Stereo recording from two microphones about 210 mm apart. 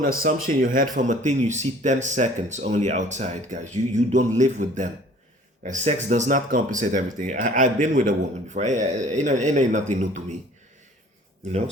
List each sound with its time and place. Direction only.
0.0 s speech: 45° right (ahead or behind)